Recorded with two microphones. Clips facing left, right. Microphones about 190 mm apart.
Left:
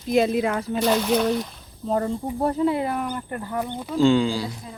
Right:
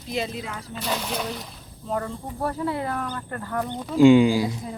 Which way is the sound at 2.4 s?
20° left (ahead or behind).